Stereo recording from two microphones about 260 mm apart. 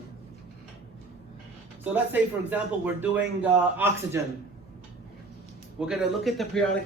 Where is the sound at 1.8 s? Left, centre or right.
Centre.